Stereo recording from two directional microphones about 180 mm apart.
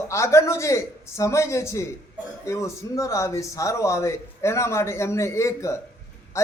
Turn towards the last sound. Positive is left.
turn(degrees=15)  # may be behind; listen again after turning